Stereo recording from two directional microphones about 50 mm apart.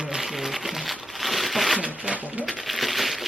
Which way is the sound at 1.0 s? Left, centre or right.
Centre.